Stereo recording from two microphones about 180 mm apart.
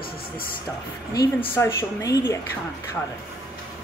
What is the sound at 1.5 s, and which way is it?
Speech, 15° left (ahead or behind).